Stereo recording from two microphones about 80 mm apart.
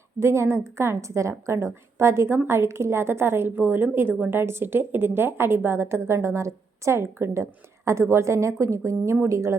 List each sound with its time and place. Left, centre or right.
0.2 s a woman's voice: right